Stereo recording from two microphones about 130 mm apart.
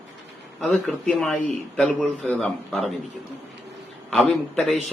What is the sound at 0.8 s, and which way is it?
A man's voice, 10° left (ahead or behind).